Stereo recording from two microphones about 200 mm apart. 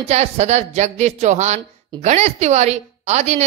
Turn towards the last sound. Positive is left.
turn(degrees=-35)  # may be behind; listen again after turning